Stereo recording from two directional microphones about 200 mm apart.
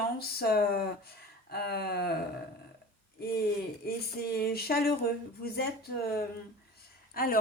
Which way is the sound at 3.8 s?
50° left (ahead or behind).